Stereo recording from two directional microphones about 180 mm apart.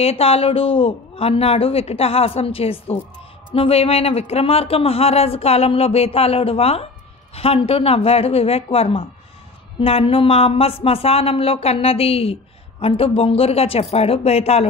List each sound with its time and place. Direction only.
0.0 s speech: 35° left (ahead or behind)